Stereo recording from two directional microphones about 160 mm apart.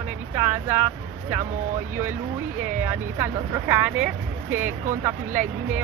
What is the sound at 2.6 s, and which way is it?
Speech, 15° right (ahead or behind).